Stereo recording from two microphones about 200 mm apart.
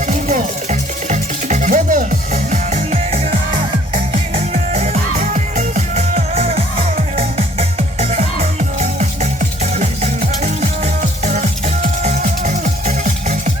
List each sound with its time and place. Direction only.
0.0 s music: 40° right (ahead or behind)